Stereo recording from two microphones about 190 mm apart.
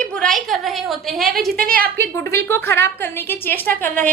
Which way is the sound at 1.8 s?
10° left (ahead or behind).